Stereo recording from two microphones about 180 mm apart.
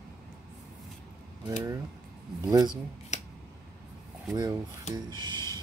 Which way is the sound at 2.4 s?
25° right (ahead or behind).